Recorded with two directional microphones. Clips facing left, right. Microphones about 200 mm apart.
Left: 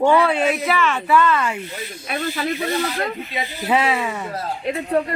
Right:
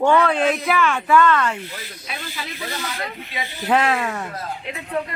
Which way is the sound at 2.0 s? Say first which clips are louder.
Left 10 dB; 50° left (ahead or behind).